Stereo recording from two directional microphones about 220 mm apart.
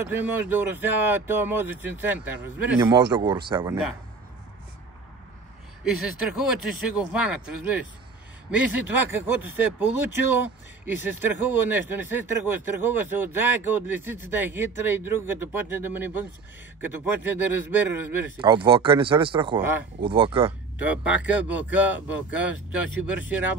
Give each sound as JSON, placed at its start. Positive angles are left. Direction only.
{"t": 0.1, "sound": "speech", "side_deg": -10}
{"t": 6.3, "sound": "speech", "side_deg": -5}
{"t": 11.1, "sound": "speech", "side_deg": -10}
{"t": 18.4, "sound": "speech", "side_deg": -20}
{"t": 20.8, "sound": "speech", "side_deg": -5}